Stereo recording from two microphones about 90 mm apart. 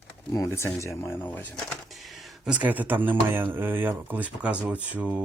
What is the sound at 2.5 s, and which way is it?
Speech, 15° right (ahead or behind).